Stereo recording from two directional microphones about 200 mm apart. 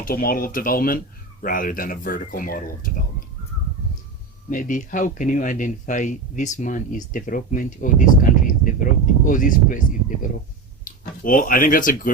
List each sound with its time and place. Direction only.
0.0 s a man's voice: 45° left (ahead or behind)
4.4 s speech: 40° left (ahead or behind)
10.8 s speech: 45° left (ahead or behind)